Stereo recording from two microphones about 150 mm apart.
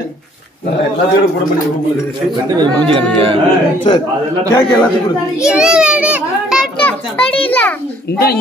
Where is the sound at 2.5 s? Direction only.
30° right (ahead or behind).